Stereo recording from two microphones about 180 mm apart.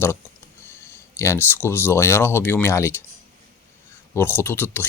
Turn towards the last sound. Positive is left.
turn(degrees=10)  # may be behind; listen again after turning